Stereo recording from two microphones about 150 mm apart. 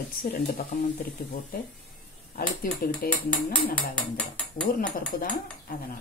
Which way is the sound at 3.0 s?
85° left.